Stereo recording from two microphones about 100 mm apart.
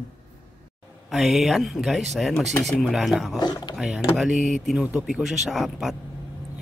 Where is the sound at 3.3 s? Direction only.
45° left (ahead or behind).